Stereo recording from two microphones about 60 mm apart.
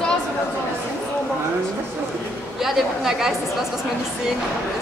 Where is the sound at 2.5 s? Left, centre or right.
Centre.